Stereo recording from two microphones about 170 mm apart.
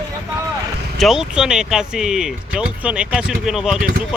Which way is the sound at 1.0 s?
5° right (ahead or behind).